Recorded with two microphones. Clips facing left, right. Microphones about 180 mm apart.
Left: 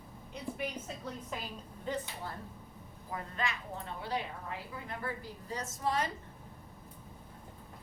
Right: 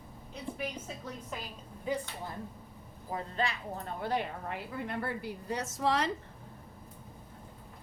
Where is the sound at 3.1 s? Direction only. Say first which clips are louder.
Right 4 dB; 35° right (ahead or behind).